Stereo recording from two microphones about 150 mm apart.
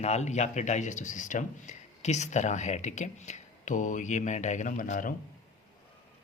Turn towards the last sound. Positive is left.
turn(degrees=60)  # may be behind; listen again after turning